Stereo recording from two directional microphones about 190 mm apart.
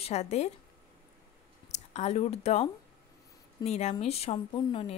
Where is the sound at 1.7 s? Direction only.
35° left (ahead or behind).